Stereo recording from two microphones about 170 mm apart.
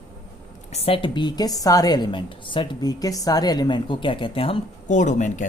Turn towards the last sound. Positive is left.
turn(degrees=45)  # may be behind; listen again after turning